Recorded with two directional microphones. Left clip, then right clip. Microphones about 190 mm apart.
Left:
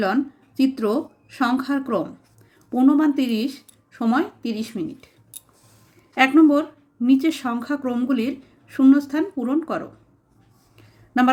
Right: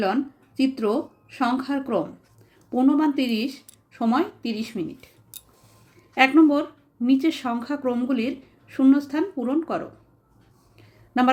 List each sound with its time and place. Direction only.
0.0 s speech: 15° left (ahead or behind)
6.1 s speech: 10° left (ahead or behind)
10.8 s a sound: 10° left (ahead or behind)